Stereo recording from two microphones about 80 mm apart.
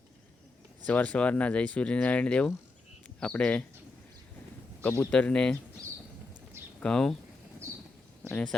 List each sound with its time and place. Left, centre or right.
0.9 s speech: centre
4.8 s speech: left
6.7 s speech: centre